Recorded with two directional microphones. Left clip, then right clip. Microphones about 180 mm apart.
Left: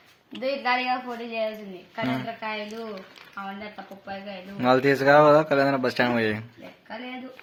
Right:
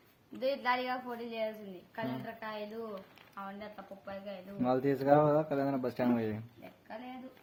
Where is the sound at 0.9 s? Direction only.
10° right (ahead or behind).